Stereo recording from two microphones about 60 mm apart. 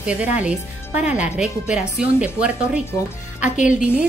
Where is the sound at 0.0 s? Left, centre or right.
Right.